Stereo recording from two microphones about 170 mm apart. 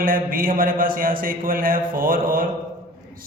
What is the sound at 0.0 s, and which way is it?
A man's voice, 55° right (ahead or behind).